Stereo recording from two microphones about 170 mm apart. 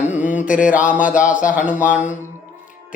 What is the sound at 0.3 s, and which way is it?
Mantra, 50° left (ahead or behind).